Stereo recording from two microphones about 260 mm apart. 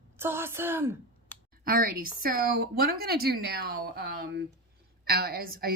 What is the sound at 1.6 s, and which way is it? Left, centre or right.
A woman's voice, right.